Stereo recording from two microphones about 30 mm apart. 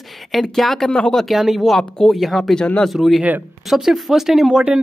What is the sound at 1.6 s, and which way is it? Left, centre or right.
Speech, centre.